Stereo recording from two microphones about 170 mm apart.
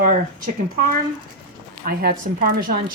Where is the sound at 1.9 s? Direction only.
60° right (ahead or behind).